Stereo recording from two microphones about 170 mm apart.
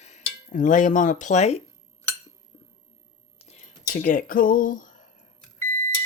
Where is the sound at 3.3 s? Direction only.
40° left (ahead or behind).